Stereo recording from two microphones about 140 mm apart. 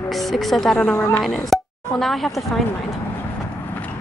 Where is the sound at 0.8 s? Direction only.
10° left (ahead or behind).